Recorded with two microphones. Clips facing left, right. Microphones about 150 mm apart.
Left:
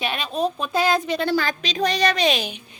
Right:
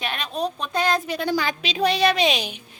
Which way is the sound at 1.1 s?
10° right (ahead or behind).